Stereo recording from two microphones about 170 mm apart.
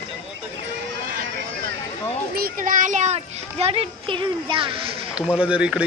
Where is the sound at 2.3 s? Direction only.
55° right (ahead or behind); by 4.9 s 30° right (ahead or behind).